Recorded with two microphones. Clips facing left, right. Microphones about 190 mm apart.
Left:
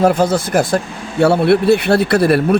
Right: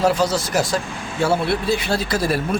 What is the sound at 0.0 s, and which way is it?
A man's voice, 55° left (ahead or behind).